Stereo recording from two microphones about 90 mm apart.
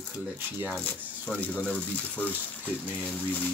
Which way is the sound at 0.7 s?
15° left (ahead or behind).